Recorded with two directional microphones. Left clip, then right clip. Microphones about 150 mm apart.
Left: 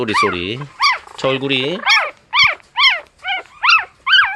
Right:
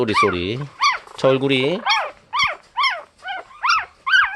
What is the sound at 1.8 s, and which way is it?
Dog, 15° left (ahead or behind).